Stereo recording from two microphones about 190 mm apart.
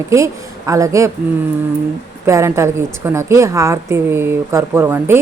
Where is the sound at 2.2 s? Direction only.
15° right (ahead or behind).